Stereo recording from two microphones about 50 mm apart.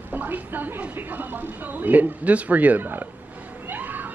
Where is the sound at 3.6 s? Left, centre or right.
Right.